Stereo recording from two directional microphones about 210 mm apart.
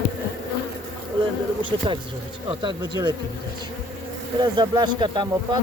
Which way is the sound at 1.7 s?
20° right (ahead or behind).